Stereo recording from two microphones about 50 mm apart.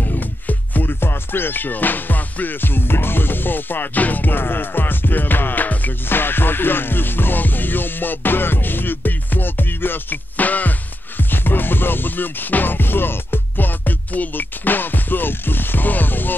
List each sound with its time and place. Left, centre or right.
0.0 s music: left
1.0 s music: left